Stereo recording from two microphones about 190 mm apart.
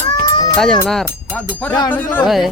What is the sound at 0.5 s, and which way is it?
Speech, 5° left (ahead or behind).